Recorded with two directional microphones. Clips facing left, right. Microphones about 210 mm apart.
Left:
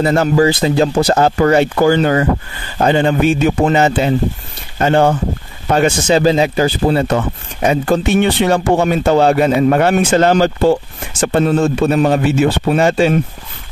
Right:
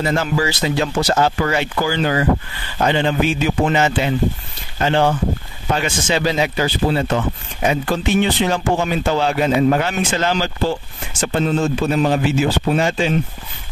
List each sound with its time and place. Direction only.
0.0 s speech: 40° left (ahead or behind)
1.1 s speech: 45° left (ahead or behind)